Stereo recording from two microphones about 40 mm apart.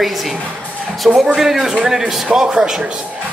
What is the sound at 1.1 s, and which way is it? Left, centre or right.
A man's voice, centre.